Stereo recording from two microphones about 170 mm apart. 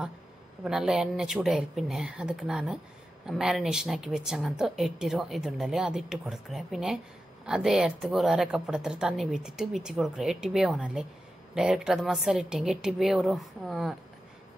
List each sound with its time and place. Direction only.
0.7 s a woman's voice: 5° right (ahead or behind)